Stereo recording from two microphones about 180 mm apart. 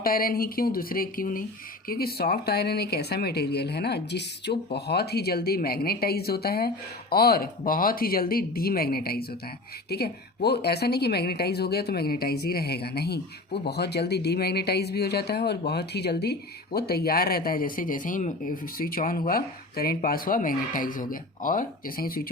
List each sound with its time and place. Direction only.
0.0 s speech: 55° left (ahead or behind)